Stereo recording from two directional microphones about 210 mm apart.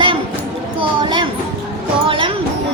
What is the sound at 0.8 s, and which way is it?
A child's voice, 20° right (ahead or behind).